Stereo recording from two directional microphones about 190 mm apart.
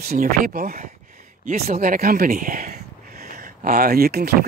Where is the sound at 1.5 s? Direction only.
45° right (ahead or behind).